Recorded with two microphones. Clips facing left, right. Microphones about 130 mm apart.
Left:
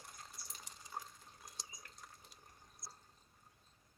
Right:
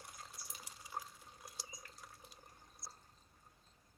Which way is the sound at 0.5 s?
5° right (ahead or behind).